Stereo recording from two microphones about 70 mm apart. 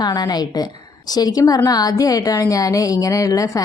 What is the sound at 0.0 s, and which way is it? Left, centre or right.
A woman's voice, left.